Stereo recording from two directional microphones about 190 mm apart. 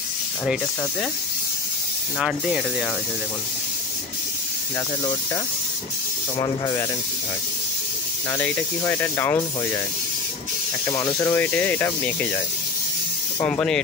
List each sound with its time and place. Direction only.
2.1 s speech: 5° right (ahead or behind)
6.3 s speech: 20° left (ahead or behind)
8.3 s speech: 10° left (ahead or behind)
10.9 s speech: 20° left (ahead or behind)
13.4 s speech: 5° left (ahead or behind)